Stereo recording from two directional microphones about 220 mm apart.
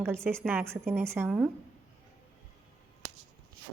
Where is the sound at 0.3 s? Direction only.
5° right (ahead or behind).